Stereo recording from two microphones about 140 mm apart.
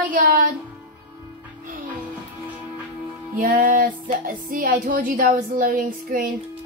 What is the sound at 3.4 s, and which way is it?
Music, 90° right.